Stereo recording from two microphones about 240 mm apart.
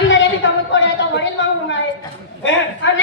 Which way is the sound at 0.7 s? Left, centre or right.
Left.